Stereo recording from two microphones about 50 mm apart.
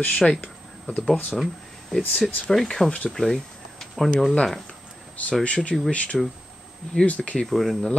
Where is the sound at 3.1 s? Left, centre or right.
Centre.